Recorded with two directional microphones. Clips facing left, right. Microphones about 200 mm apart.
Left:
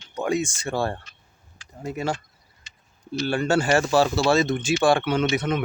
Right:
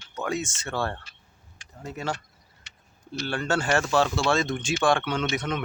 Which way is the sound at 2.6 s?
70° right (ahead or behind).